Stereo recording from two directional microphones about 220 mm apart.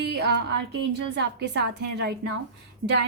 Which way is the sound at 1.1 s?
50° right (ahead or behind).